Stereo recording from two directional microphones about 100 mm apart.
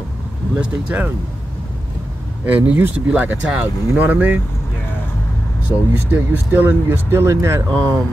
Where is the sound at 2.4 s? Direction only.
15° right (ahead or behind).